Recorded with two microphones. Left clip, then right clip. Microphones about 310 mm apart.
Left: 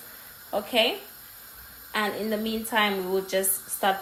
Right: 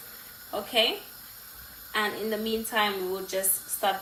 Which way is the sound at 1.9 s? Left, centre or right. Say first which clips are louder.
Left 1 dB; left.